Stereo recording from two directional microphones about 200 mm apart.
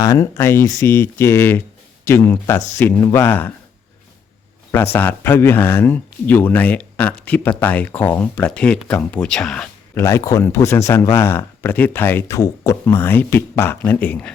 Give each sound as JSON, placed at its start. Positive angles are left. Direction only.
{"t": 0.0, "sound": "speech", "side_deg": 15}
{"t": 4.7, "sound": "speech", "side_deg": 10}